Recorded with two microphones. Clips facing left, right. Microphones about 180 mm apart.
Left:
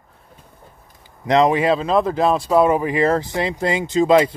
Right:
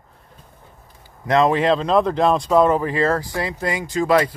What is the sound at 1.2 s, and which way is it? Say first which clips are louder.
Speech: left 1 dB; 20° left (ahead or behind).